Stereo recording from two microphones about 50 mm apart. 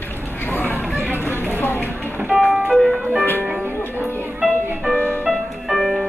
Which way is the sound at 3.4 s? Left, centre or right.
Right.